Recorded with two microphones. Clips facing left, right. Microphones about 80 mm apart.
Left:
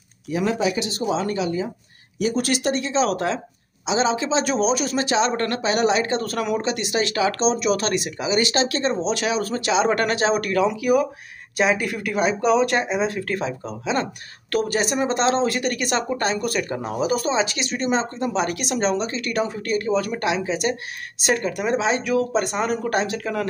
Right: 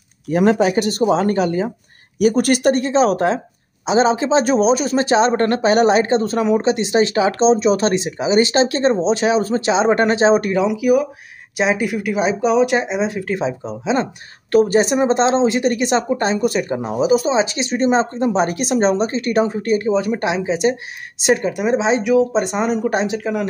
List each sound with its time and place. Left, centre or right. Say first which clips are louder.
0.3 s speech: right 7 dB; right; by 13.4 s centre
13.4 s speech: right 5 dB; right